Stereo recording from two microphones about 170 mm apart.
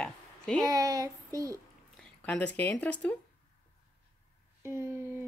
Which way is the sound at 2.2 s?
10° left (ahead or behind).